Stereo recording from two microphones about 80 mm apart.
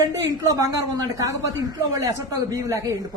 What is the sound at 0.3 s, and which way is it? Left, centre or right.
Speech, right.